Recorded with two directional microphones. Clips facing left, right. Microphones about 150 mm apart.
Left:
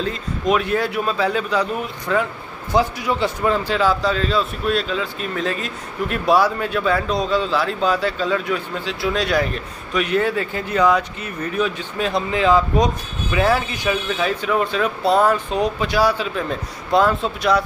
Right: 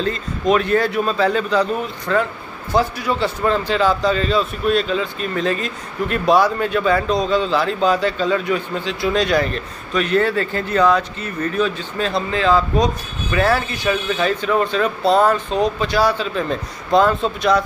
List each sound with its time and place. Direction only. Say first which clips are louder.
0.0 s a man's voice: right 2 dB; 5° left (ahead or behind)